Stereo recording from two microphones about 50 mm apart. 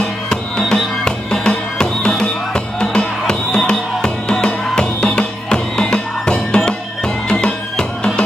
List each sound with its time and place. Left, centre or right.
0.3 s music: centre